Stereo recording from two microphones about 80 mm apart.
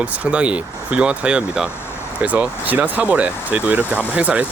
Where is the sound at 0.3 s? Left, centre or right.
Centre.